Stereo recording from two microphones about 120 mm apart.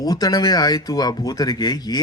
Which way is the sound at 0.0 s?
30° left (ahead or behind).